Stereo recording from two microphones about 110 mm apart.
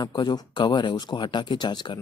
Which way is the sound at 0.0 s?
40° left (ahead or behind).